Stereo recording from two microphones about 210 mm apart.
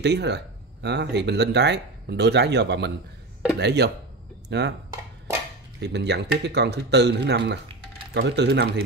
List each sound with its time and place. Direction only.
0.0 s speech: 55° right (ahead or behind)
5.8 s speech: 55° right (ahead or behind)